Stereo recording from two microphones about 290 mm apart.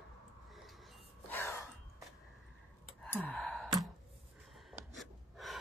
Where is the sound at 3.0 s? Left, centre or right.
Centre.